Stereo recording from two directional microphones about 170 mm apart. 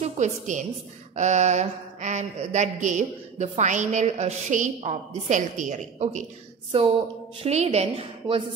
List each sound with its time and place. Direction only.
0.0 s a woman's voice: 45° right (ahead or behind)
1.1 s mantra: 45° right (ahead or behind)
7.4 s a woman's voice: 40° right (ahead or behind)